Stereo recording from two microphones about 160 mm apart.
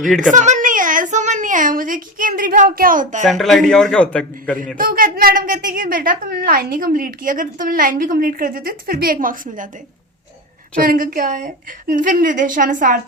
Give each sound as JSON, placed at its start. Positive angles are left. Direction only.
{"t": 0.2, "sound": "a sound", "side_deg": -50}
{"t": 3.2, "sound": "a man's voice", "side_deg": 0}
{"t": 4.8, "sound": "a woman's voice", "side_deg": -60}
{"t": 9.2, "sound": "a woman's voice", "side_deg": -55}
{"t": 10.8, "sound": "a woman's voice", "side_deg": -60}